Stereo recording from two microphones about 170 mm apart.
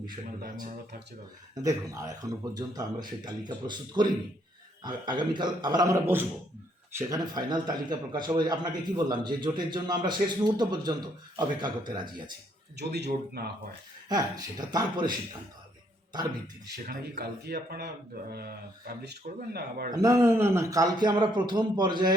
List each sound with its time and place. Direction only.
1.5 s a man's voice: 20° right (ahead or behind)
12.7 s speech: 80° right
14.1 s a man's voice: 20° right (ahead or behind)
16.8 s speech: 65° right (ahead or behind)
19.9 s a man's voice: 20° right (ahead or behind)